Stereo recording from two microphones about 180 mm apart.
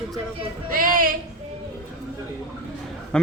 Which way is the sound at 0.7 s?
50° right (ahead or behind).